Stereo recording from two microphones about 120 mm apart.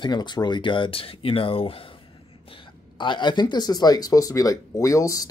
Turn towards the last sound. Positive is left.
turn(degrees=25)  # may be behind; listen again after turning